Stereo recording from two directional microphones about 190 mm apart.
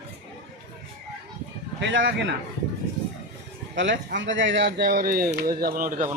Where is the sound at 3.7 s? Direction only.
70° right (ahead or behind); by 6.0 s 45° right (ahead or behind).